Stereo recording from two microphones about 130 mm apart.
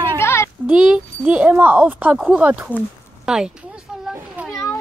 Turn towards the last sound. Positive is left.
turn(degrees=-5)  # may be behind; listen again after turning